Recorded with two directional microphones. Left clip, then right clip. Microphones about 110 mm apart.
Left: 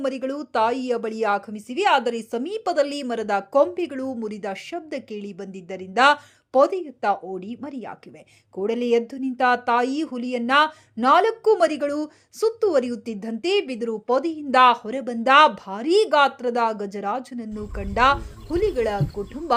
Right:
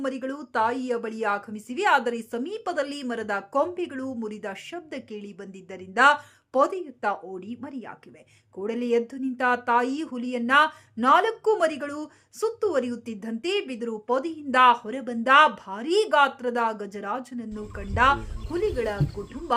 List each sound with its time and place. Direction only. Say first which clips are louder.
0.0 s a woman's voice: left 4 dB; 30° left (ahead or behind)